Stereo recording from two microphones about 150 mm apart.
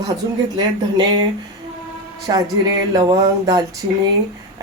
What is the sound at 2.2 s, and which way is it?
Speech, 25° right (ahead or behind).